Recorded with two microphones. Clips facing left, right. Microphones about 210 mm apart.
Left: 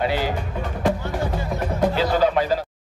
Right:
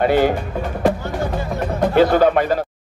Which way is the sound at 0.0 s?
55° right (ahead or behind).